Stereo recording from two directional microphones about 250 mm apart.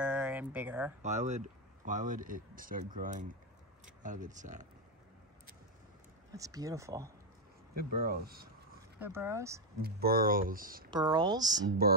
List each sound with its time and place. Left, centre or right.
0.0 s a sound: centre
1.0 s speech: right
6.3 s speech: centre
7.7 s speech: right
9.0 s speech: centre
9.8 s speech: right
10.9 s speech: centre